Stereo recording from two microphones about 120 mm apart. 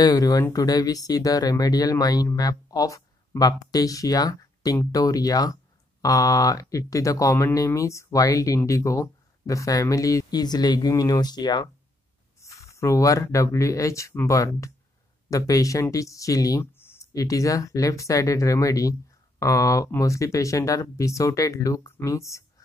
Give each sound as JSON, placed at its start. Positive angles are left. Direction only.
{"t": 0.0, "sound": "speech", "side_deg": 35}
{"t": 12.4, "sound": "speech", "side_deg": 25}